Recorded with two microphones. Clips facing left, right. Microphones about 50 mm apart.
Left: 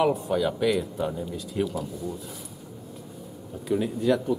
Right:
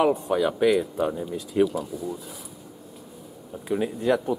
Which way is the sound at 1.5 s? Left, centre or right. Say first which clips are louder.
Right 7 dB; centre.